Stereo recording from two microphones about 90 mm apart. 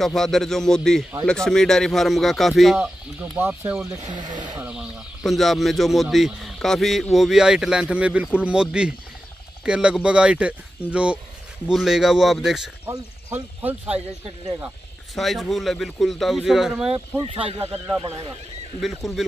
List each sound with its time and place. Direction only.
0.0 s speech: 5° left (ahead or behind)
2.8 s speech: 20° right (ahead or behind)
4.1 s speech: 55° right (ahead or behind)
4.6 s a sound: 15° right (ahead or behind)
5.2 s speech: centre (ahead or behind)
13.3 s speech: 20° right (ahead or behind)
15.1 s speech: centre (ahead or behind)
18.8 s speech: centre (ahead or behind)